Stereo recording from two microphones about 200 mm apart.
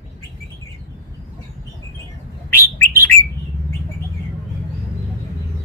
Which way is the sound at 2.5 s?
10° left (ahead or behind).